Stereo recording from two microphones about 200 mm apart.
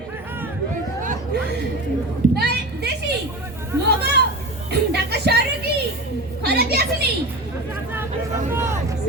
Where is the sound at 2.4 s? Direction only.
55° right (ahead or behind).